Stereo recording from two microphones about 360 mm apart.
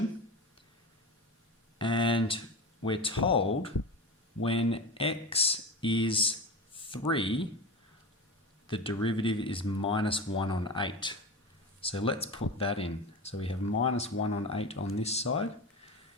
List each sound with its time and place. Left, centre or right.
1.8 s a sound: centre
2.8 s speech: centre
8.6 s speech: centre